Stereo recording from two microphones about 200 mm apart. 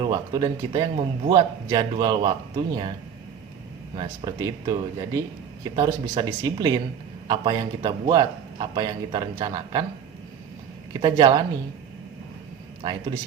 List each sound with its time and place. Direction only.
0.0 s a man's voice: 20° right (ahead or behind)
3.9 s a man's voice: 20° right (ahead or behind)
11.0 s a man's voice: 20° right (ahead or behind)
12.8 s a man's voice: 20° right (ahead or behind)